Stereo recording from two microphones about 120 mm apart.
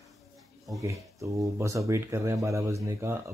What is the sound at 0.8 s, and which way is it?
Speech, 25° right (ahead or behind).